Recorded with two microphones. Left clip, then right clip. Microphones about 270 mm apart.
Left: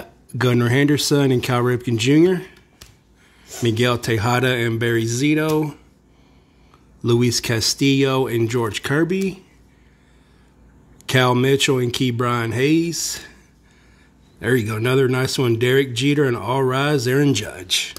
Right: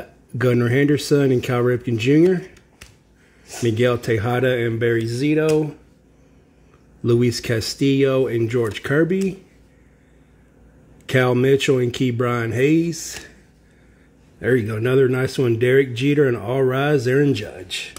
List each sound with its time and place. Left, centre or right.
0.4 s speech: centre
3.6 s speech: centre
7.0 s speech: centre
11.1 s speech: centre
14.4 s speech: centre
17.6 s speech: left